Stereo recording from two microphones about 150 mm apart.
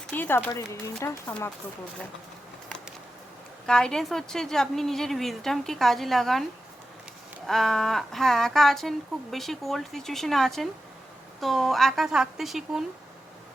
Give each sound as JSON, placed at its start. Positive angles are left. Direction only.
{"t": 0.1, "sound": "speech", "side_deg": 15}
{"t": 3.7, "sound": "speech", "side_deg": 5}
{"t": 7.4, "sound": "speech", "side_deg": 0}